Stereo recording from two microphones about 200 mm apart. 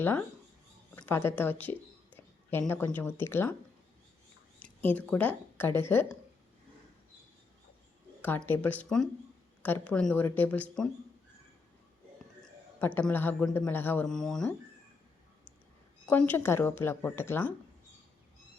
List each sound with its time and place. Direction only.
0.9 s a woman's voice: 10° left (ahead or behind)
4.6 s speech: 10° left (ahead or behind)
8.2 s a woman's voice: 10° left (ahead or behind)
12.4 s a man's voice: 5° left (ahead or behind)
16.0 s a woman's voice: 10° left (ahead or behind)